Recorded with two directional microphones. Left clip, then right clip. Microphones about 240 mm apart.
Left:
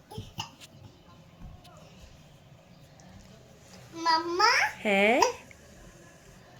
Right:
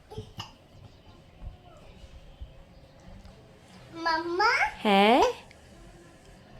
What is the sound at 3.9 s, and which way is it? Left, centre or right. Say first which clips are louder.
Speech: left 1 dB; centre.